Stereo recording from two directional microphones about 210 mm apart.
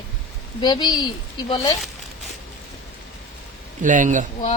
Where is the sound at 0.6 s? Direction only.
20° left (ahead or behind).